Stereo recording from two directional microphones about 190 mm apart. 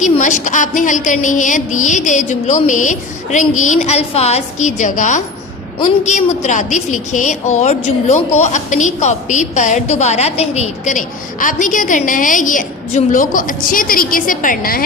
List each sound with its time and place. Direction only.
0.2 s a woman's voice: 40° left (ahead or behind)